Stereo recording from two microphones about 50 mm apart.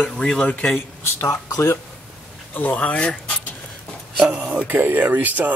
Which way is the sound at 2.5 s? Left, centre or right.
Left.